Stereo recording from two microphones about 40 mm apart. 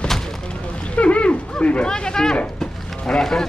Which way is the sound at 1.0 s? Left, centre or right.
Left.